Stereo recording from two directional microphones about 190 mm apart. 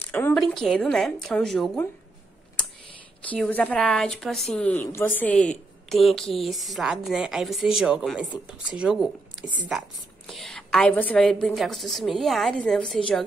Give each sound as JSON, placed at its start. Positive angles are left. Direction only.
{"t": 0.0, "sound": "a woman's voice", "side_deg": 10}
{"t": 3.3, "sound": "a woman's voice", "side_deg": 10}